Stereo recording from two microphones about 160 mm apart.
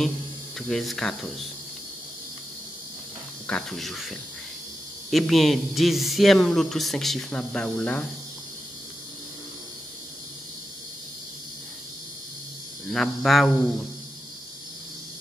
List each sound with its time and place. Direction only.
0.6 s speech: centre (ahead or behind)
3.4 s speech: 5° left (ahead or behind)
12.9 s speech: centre (ahead or behind)